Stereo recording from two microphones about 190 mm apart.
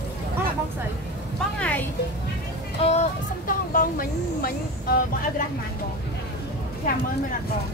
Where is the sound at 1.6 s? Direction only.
10° left (ahead or behind).